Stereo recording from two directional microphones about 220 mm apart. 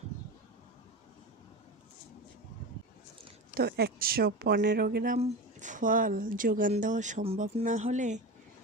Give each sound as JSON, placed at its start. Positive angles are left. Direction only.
{"t": 3.5, "sound": "speech", "side_deg": -45}
{"t": 5.1, "sound": "speech", "side_deg": -35}